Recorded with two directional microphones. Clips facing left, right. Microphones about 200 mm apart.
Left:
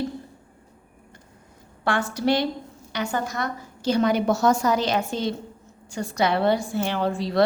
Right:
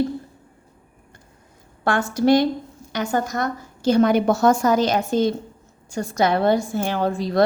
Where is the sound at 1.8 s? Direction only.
45° right (ahead or behind).